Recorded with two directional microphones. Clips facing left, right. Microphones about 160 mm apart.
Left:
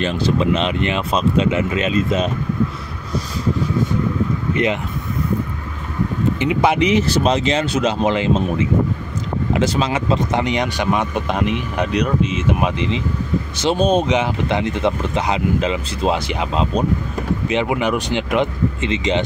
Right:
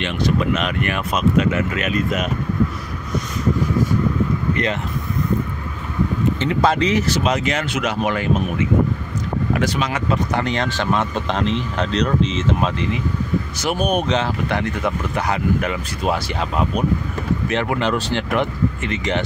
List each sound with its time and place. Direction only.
0.0 s speech: 30° left (ahead or behind)
6.4 s speech: 15° left (ahead or behind)